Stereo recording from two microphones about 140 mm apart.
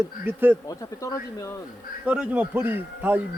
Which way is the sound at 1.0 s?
20° left (ahead or behind).